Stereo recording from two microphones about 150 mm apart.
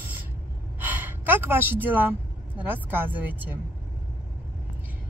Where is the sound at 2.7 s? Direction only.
15° right (ahead or behind).